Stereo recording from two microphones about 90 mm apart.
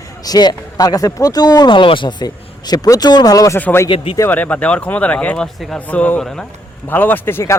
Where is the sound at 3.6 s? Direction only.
20° left (ahead or behind).